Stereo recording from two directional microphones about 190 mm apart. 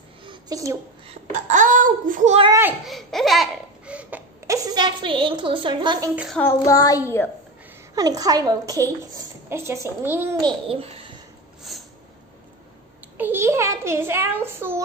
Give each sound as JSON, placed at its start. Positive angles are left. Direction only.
{"t": 0.2, "sound": "a sound", "side_deg": -20}
{"t": 1.5, "sound": "child singing", "side_deg": -40}
{"t": 2.4, "sound": "a woman's voice", "side_deg": -15}
{"t": 2.8, "sound": "laughter", "side_deg": 0}
{"t": 4.6, "sound": "a child's voice", "side_deg": -25}
{"t": 6.1, "sound": "child singing", "side_deg": 0}
{"t": 6.4, "sound": "child singing", "side_deg": 15}
{"t": 7.9, "sound": "a woman's voice", "side_deg": -20}
{"t": 10.4, "sound": "a child's voice", "side_deg": -30}
{"t": 11.7, "sound": "a sound", "side_deg": 0}
{"t": 13.2, "sound": "a woman's voice", "side_deg": -10}